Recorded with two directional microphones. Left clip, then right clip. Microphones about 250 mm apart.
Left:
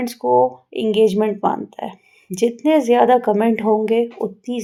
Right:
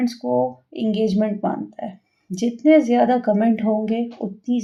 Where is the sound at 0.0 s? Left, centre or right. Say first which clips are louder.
Left 5 dB; left.